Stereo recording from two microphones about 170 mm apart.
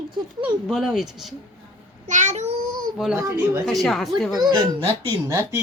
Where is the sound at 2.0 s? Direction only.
45° right (ahead or behind).